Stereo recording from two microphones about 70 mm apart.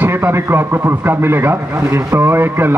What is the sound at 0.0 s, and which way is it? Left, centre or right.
A man's voice, right.